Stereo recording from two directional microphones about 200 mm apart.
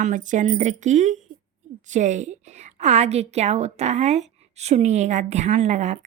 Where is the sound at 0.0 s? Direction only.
40° right (ahead or behind).